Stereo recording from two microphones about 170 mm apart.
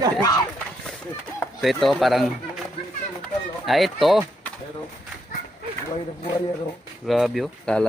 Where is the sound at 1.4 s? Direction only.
Centre (ahead or behind).